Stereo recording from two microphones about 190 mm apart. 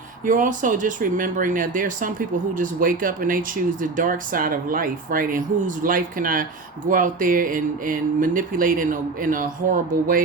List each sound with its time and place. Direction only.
0.3 s speech: 45° right (ahead or behind)